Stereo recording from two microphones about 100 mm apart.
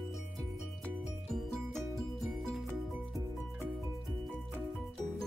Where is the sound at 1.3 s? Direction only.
Centre (ahead or behind).